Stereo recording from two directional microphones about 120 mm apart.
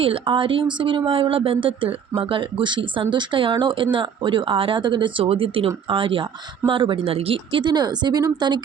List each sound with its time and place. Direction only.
0.0 s speech: 45° right (ahead or behind)